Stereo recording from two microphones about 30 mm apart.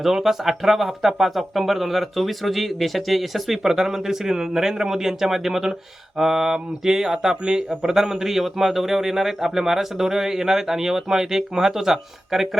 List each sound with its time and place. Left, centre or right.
0.0 s speech: centre
7.9 s speech: centre